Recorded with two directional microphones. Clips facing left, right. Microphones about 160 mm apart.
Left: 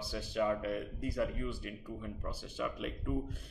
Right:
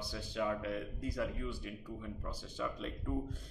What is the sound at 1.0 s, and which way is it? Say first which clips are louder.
Speech: left 3 dB; 60° left (ahead or behind).